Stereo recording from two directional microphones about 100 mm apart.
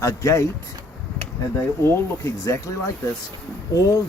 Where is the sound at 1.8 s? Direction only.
30° left (ahead or behind).